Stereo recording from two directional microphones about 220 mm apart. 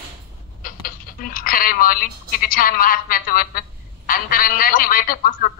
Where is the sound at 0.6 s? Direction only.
40° left (ahead or behind).